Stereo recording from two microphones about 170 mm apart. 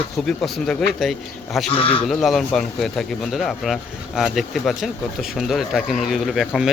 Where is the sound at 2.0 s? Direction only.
Centre (ahead or behind).